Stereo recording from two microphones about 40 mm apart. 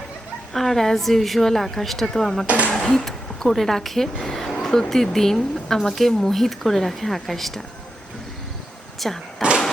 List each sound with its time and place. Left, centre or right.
0.5 s a woman's voice: centre
2.7 s a sound: centre
3.1 s a woman's voice: centre
9.0 s speech: centre